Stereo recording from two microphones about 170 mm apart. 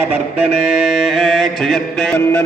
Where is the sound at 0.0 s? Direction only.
5° right (ahead or behind).